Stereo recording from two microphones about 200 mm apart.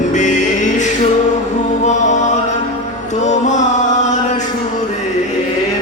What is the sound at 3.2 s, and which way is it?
Music, 35° left (ahead or behind).